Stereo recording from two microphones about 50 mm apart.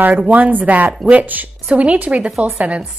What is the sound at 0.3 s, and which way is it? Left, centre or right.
A woman's voice, right.